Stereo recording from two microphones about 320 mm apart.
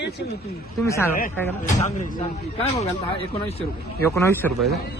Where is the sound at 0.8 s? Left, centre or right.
Centre.